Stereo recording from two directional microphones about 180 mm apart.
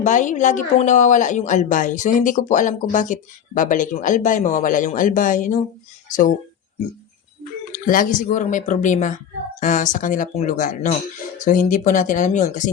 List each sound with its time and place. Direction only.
0.0 s speech: 45° left (ahead or behind)
7.7 s speech: 50° left (ahead or behind)